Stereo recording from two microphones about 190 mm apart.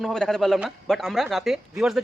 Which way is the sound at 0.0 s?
Centre (ahead or behind).